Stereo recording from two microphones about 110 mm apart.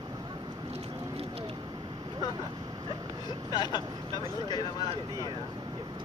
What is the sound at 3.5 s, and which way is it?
Speech, 40° left (ahead or behind).